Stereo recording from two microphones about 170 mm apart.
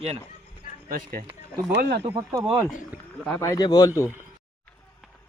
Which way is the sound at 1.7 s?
80° right.